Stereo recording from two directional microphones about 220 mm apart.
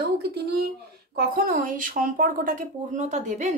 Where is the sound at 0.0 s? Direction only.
50° right (ahead or behind).